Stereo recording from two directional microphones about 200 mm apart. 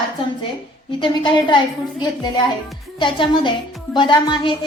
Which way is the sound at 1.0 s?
25° left (ahead or behind).